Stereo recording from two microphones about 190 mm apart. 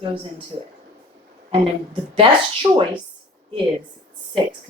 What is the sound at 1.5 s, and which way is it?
Speech, 30° right (ahead or behind).